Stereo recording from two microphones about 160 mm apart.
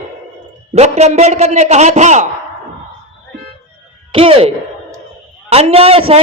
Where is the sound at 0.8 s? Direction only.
45° right (ahead or behind).